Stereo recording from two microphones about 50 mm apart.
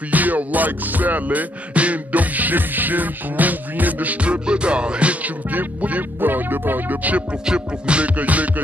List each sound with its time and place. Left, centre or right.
0.1 s music: right
5.5 s music: right
7.4 s music: centre